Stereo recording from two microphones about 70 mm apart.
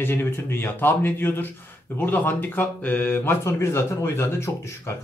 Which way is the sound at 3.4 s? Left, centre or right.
Left.